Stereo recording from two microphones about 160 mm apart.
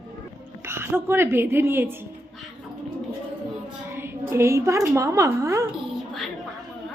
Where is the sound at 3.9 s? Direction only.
15° right (ahead or behind).